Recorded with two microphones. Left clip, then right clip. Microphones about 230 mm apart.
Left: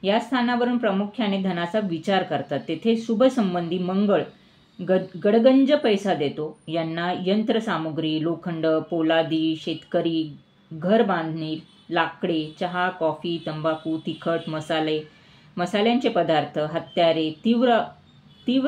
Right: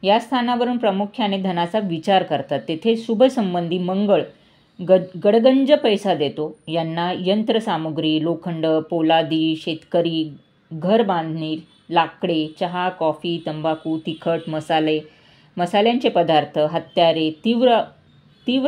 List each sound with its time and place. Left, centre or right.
0.0 s a woman's voice: right